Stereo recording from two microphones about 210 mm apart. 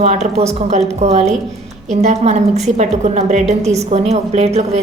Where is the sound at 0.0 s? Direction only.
30° right (ahead or behind).